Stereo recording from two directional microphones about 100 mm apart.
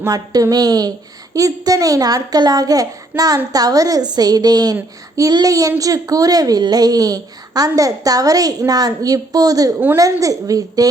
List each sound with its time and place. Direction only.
0.0 s a woman's voice: 30° right (ahead or behind)